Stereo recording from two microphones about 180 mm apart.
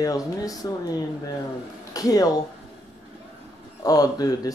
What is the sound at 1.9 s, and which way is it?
Speech, 20° left (ahead or behind).